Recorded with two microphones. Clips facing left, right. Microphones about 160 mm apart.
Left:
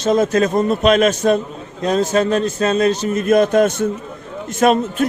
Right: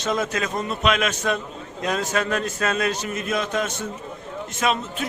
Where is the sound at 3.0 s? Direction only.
40° left (ahead or behind).